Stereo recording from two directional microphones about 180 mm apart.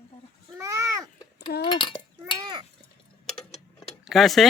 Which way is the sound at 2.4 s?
25° right (ahead or behind).